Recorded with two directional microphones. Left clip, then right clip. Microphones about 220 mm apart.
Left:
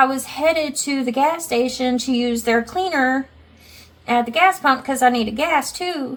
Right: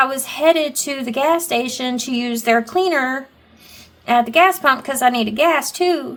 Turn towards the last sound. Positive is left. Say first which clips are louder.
# right 4 dB
turn(degrees=-45)  # may be behind; listen again after turning